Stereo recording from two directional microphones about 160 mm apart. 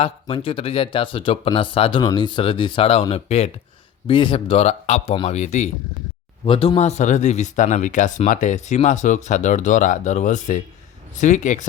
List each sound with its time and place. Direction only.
0.3 s a man's voice: 35° left (ahead or behind)